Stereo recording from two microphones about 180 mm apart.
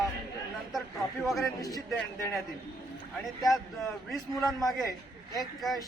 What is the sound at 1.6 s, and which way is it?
Speech, 20° left (ahead or behind).